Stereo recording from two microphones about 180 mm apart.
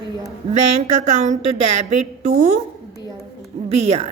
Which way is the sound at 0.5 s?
40° right (ahead or behind).